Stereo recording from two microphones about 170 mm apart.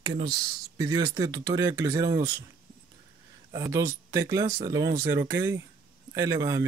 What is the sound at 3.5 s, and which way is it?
Speech, 20° right (ahead or behind).